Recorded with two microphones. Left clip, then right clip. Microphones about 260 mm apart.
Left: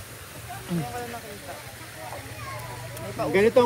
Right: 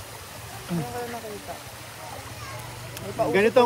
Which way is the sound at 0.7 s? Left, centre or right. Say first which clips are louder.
Right 1 dB; centre.